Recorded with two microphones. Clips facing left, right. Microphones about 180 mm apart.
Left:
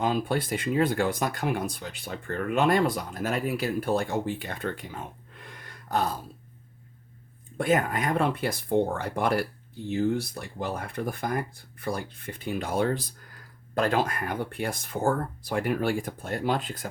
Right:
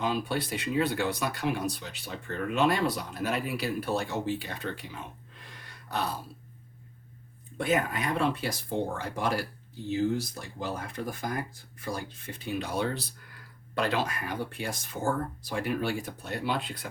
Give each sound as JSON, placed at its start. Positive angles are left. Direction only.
{"t": 0.0, "sound": "speech", "side_deg": 50}
{"t": 7.6, "sound": "speech", "side_deg": 50}